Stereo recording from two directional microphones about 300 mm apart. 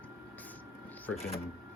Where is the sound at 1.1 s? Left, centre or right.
Centre.